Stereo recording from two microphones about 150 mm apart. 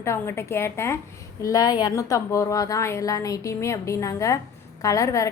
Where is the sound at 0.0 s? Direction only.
15° left (ahead or behind).